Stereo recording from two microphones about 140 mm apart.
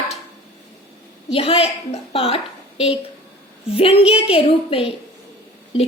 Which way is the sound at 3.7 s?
45° left (ahead or behind).